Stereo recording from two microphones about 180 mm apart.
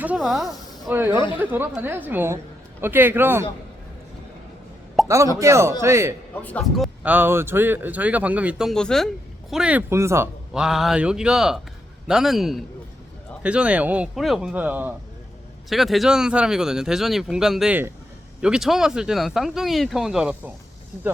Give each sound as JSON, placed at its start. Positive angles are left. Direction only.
{"t": 0.0, "sound": "speech", "side_deg": -5}
{"t": 0.9, "sound": "speech", "side_deg": -10}
{"t": 5.0, "sound": "speech", "side_deg": -15}
{"t": 6.4, "sound": "speech", "side_deg": 5}
{"t": 10.5, "sound": "speech", "side_deg": -5}